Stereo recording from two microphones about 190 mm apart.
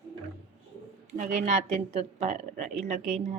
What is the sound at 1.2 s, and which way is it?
A woman's voice, 40° right (ahead or behind).